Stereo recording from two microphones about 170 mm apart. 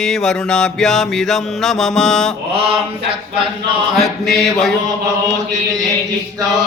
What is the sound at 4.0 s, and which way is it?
Mantra, centre (ahead or behind).